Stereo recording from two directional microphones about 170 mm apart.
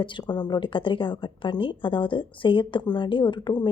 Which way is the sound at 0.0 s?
25° left (ahead or behind).